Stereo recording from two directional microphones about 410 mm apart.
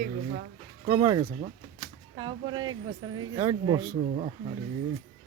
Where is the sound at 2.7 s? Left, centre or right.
Right.